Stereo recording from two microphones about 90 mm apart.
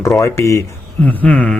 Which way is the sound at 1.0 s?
20° left (ahead or behind).